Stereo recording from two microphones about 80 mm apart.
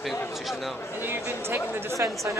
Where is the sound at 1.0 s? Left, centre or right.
Right.